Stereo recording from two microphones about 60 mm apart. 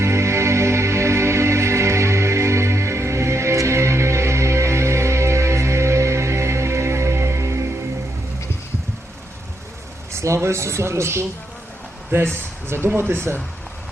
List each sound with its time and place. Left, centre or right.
0.0 s music: right
10.2 s speech: right